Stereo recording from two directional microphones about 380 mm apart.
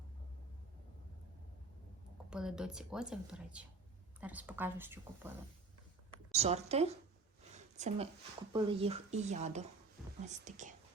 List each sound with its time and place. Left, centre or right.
2.3 s speech: centre
6.3 s speech: centre